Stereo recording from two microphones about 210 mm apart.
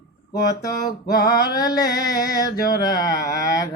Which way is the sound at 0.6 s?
20° left (ahead or behind).